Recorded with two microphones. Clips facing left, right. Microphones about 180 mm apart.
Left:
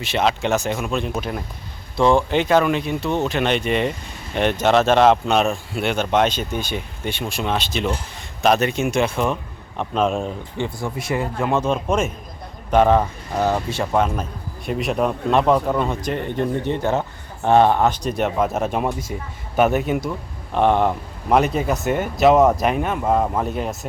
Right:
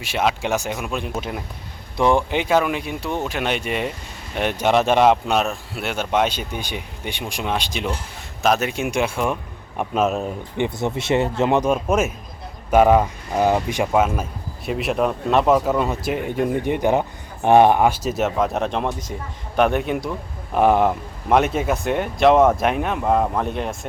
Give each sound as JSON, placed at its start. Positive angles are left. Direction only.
{"t": 0.0, "sound": "speech", "side_deg": -10}
{"t": 10.6, "sound": "speech", "side_deg": -25}